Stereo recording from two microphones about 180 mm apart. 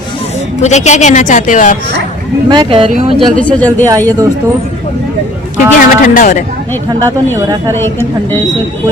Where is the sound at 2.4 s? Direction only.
25° right (ahead or behind).